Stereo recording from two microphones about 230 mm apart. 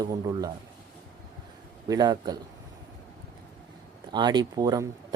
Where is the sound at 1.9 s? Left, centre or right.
Centre.